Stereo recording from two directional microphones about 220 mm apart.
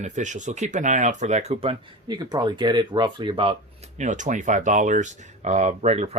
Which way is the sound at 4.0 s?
35° right (ahead or behind).